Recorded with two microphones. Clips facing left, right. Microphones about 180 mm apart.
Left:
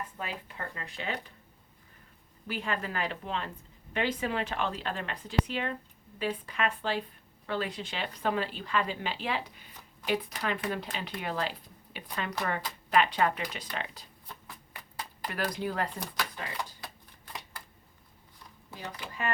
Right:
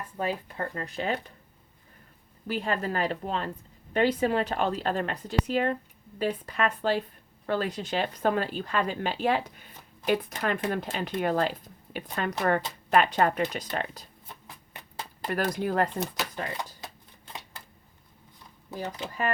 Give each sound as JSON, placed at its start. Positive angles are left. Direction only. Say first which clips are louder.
{"t": 0.2, "sound": "a woman's voice", "louder": "right 8 dB", "side_deg": -40}
{"t": 2.5, "sound": "a woman's voice", "louder": "right 5 dB", "side_deg": -40}
{"t": 14.4, "sound": "a sound", "louder": "right 1 dB", "side_deg": -25}
{"t": 15.3, "sound": "speech", "louder": "right 6 dB", "side_deg": -45}
{"t": 16.6, "sound": "a sound", "louder": "right 1 dB", "side_deg": -20}
{"t": 18.7, "sound": "speech", "louder": "right 7 dB", "side_deg": -40}